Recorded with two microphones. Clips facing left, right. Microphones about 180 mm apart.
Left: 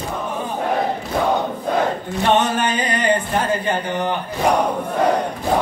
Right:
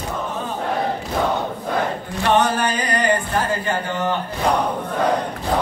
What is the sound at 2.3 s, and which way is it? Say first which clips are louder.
Music: even; 20° left (ahead or behind).